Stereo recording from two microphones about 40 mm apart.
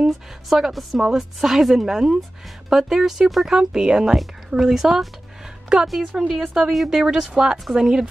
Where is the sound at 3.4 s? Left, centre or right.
Centre.